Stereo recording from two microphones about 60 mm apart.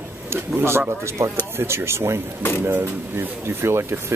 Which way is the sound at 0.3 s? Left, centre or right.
Right.